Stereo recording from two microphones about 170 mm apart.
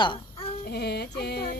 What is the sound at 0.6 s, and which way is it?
Music, 70° left (ahead or behind).